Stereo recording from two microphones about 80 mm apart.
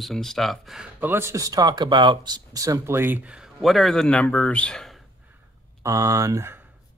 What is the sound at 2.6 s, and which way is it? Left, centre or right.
Speech, right.